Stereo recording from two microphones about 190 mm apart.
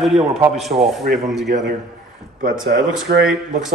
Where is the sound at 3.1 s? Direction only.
55° right (ahead or behind).